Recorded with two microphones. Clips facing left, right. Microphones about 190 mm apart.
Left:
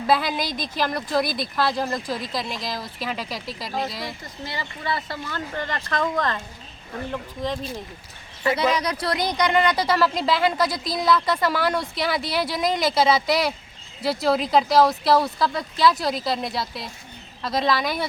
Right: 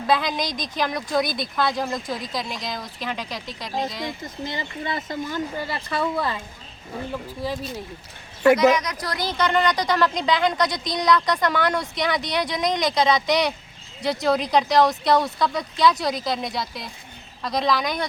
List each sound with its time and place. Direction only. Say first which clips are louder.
0.1 s speech: even; 5° left (ahead or behind)
4.2 s speech: right 3 dB; 20° right (ahead or behind)
8.5 s speech: right 4 dB; 30° left (ahead or behind)
9.5 s speech: even; 10° left (ahead or behind)